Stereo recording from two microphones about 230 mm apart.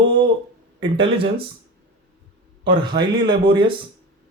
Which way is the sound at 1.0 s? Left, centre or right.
Right.